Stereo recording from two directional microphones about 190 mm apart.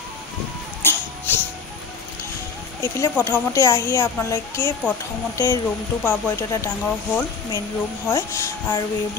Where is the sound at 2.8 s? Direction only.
15° left (ahead or behind).